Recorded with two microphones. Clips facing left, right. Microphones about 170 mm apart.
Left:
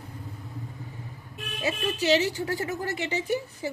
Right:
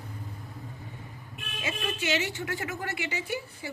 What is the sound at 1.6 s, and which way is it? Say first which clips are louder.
A woman's voice: left 5 dB; 35° left (ahead or behind).